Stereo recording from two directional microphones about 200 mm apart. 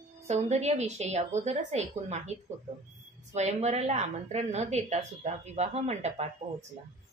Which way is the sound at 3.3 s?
35° right (ahead or behind).